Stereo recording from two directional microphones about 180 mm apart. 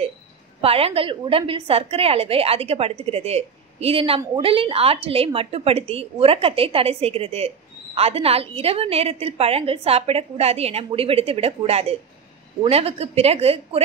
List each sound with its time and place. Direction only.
0.6 s a woman's voice: 30° right (ahead or behind)